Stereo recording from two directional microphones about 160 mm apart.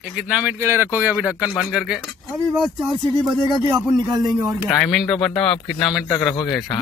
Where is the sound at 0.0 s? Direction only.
5° right (ahead or behind).